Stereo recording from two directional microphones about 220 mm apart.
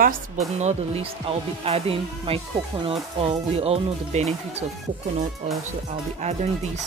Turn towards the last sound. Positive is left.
turn(degrees=-30)  # may be behind; listen again after turning